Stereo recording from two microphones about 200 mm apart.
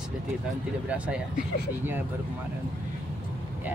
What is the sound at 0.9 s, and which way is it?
Speech, 5° right (ahead or behind).